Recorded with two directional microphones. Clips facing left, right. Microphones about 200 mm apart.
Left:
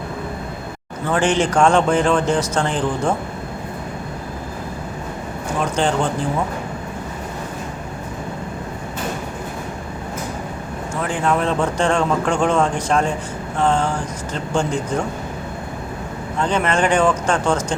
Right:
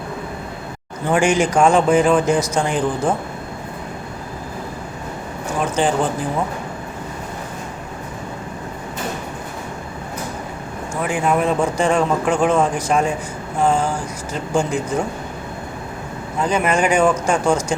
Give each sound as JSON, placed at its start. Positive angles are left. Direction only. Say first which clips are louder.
{"t": 1.0, "sound": "speech", "louder": "right 2 dB", "side_deg": -10}
{"t": 5.5, "sound": "speech", "louder": "right 1 dB", "side_deg": -5}
{"t": 11.0, "sound": "speech", "louder": "right 2 dB", "side_deg": -10}
{"t": 16.4, "sound": "speech", "louder": "right 1 dB", "side_deg": -10}